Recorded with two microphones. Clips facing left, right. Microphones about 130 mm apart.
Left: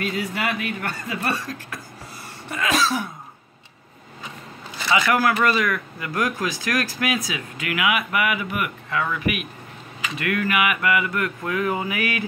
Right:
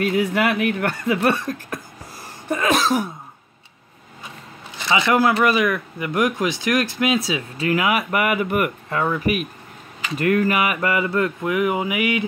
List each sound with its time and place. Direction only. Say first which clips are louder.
0.0 s speech: right 6 dB; 55° right (ahead or behind)
2.5 s throat clearing: right 4 dB; 50° right (ahead or behind)
4.8 s speech: right 2 dB; 25° right (ahead or behind)